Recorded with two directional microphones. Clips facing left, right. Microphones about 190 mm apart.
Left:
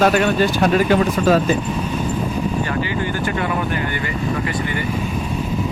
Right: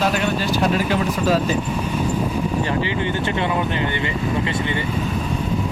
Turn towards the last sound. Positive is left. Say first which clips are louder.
# even
turn(degrees=-25)  # may be behind; listen again after turning